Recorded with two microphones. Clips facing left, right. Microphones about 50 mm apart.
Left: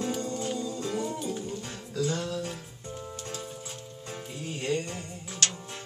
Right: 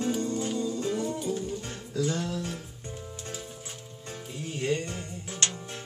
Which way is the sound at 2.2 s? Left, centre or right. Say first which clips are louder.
Even; right.